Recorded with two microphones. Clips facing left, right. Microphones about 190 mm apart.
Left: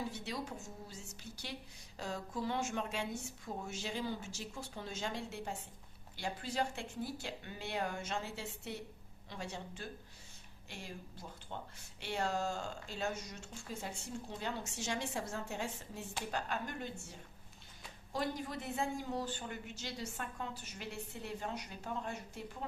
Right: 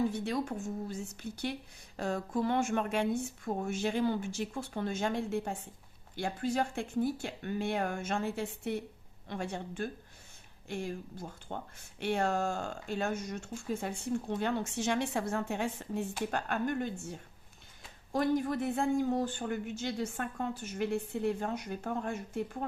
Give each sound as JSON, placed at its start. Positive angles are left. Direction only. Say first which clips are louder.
{"t": 0.1, "sound": "a woman's voice", "louder": "right 9 dB", "side_deg": -55}